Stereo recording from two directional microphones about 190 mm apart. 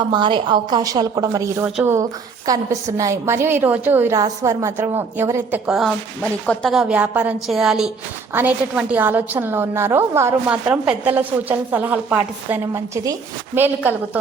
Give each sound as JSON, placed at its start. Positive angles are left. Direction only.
{"t": 0.1, "sound": "a woman's voice", "side_deg": -25}